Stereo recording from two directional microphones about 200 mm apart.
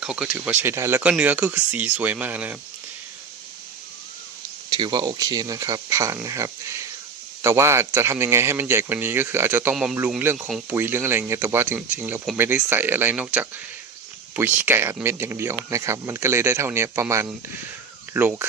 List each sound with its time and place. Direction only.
0.0 s speech: 5° right (ahead or behind)
4.7 s speech: 20° right (ahead or behind)